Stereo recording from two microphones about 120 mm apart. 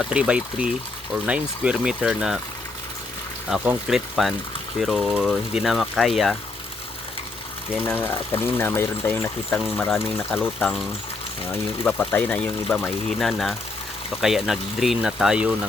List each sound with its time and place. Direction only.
0.0 s speech: 5° right (ahead or behind)
3.5 s speech: 15° right (ahead or behind)
3.8 s speech: 5° right (ahead or behind)
7.9 s speech: 15° left (ahead or behind); by 10.8 s centre (ahead or behind)
11.8 s speech: 15° left (ahead or behind); by 15.5 s 10° right (ahead or behind)